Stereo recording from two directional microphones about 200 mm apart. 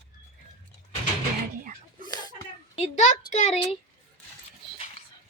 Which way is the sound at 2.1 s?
20° left (ahead or behind).